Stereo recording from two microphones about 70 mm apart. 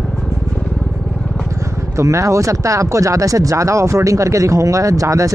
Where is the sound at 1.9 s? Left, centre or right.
Right.